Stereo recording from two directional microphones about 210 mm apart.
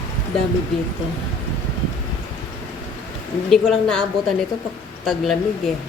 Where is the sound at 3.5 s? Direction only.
5° left (ahead or behind).